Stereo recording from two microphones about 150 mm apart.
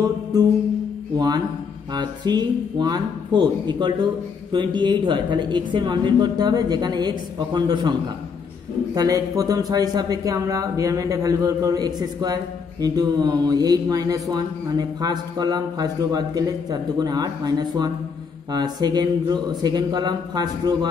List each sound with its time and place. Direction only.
0.0 s music: 25° right (ahead or behind)
1.1 s speech: 25° right (ahead or behind)
8.9 s speech: 25° right (ahead or behind)